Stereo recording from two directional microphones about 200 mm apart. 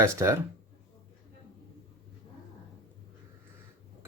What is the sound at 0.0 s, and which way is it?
Speech, 15° right (ahead or behind).